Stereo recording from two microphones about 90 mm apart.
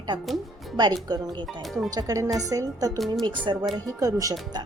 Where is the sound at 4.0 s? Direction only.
40° right (ahead or behind).